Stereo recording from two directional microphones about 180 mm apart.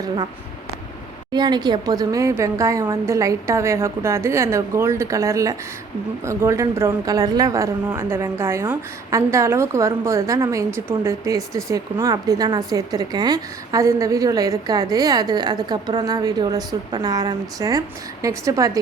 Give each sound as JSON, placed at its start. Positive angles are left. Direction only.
{"t": 1.3, "sound": "a woman's voice", "side_deg": -25}